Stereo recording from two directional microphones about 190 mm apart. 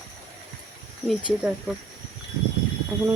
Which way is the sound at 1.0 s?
Centre (ahead or behind).